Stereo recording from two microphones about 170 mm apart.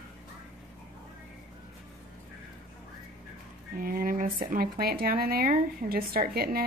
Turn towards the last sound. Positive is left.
turn(degrees=-65)  # may be behind; listen again after turning